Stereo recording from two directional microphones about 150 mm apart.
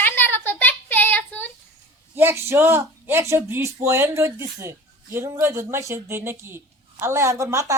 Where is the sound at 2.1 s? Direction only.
15° right (ahead or behind).